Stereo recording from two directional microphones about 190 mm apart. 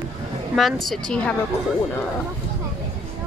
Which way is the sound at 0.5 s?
Centre (ahead or behind).